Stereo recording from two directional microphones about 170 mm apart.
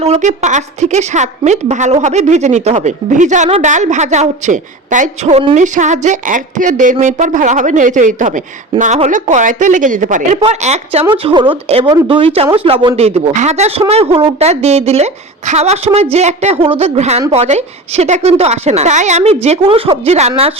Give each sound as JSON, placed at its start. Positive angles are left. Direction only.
{"t": 0.0, "sound": "a woman's voice", "side_deg": -40}
{"t": 5.5, "sound": "a woman's voice", "side_deg": -45}
{"t": 11.1, "sound": "a woman's voice", "side_deg": -30}